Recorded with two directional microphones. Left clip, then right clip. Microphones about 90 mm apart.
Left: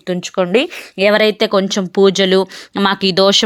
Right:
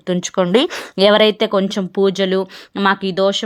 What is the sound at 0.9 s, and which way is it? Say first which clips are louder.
Speech: even; 10° right (ahead or behind).